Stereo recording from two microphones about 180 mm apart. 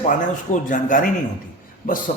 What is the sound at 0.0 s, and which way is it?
Speech, 45° left (ahead or behind).